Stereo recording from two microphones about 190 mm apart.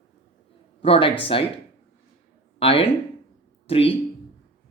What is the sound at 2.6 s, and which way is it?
Speech, 30° left (ahead or behind).